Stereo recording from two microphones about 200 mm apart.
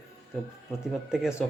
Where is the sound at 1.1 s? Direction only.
5° right (ahead or behind).